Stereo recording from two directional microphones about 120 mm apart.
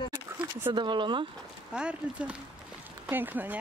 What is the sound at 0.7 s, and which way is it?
Speech, 40° right (ahead or behind).